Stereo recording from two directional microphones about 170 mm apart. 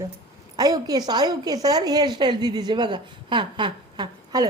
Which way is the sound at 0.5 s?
25° right (ahead or behind).